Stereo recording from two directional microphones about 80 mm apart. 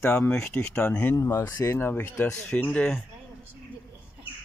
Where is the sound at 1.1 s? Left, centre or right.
Left.